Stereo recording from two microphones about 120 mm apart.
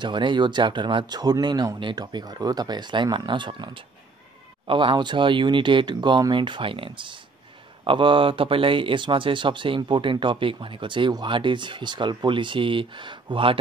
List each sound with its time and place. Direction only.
0.0 s speech: 40° right (ahead or behind)